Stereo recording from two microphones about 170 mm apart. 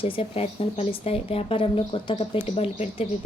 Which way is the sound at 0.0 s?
35° left (ahead or behind).